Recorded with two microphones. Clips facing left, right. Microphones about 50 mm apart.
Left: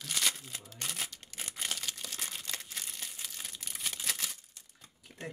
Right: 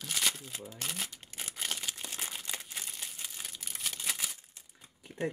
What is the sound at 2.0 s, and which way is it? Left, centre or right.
Crumpling, right.